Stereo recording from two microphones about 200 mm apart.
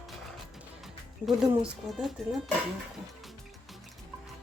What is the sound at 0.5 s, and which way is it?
Music, centre (ahead or behind).